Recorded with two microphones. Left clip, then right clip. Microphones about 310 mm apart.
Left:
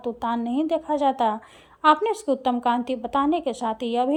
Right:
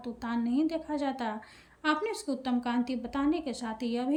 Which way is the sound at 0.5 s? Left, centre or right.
Left.